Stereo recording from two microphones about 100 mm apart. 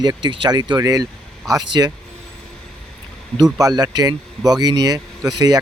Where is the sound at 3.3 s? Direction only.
35° right (ahead or behind).